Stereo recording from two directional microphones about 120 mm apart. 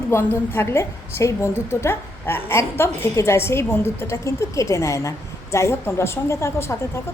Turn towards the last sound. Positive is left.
turn(degrees=20)  # may be behind; listen again after turning